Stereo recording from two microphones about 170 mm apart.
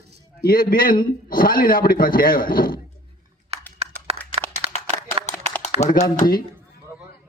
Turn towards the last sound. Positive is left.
turn(degrees=50)  # may be behind; listen again after turning